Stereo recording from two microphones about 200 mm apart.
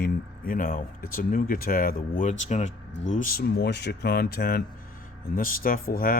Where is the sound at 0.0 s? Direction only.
45° left (ahead or behind).